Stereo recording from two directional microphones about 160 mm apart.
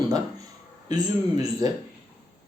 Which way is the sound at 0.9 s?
25° right (ahead or behind).